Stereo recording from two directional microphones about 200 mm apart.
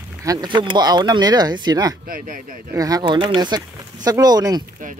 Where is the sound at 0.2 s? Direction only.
20° right (ahead or behind).